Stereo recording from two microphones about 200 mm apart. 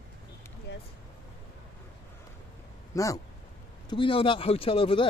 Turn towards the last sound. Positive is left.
turn(degrees=25)  # may be behind; listen again after turning